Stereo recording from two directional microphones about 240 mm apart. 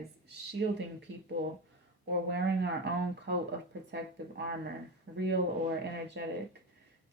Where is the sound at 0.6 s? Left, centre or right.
Right.